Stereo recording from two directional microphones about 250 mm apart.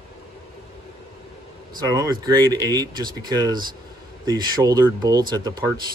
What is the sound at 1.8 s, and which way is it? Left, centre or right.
Speech, centre.